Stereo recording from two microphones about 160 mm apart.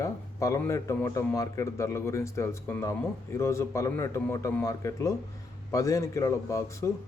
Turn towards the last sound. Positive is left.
turn(degrees=20)  # may be behind; listen again after turning